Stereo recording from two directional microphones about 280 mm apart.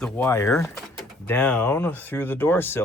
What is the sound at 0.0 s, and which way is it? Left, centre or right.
Speech, centre.